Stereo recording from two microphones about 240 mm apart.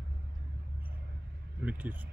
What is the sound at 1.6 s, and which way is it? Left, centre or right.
Speech, centre.